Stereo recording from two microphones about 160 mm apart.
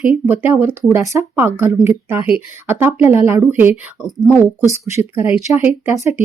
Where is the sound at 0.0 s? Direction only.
10° right (ahead or behind).